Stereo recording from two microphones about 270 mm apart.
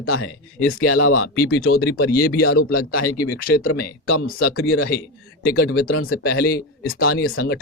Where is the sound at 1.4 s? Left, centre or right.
Left.